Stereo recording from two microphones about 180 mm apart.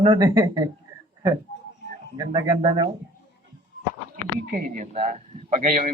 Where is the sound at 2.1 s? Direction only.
25° right (ahead or behind).